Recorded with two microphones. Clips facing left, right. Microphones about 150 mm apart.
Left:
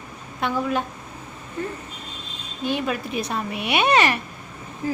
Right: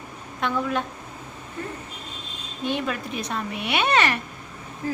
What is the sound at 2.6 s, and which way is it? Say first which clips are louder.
A child's voice: left 2 dB; 5° left (ahead or behind).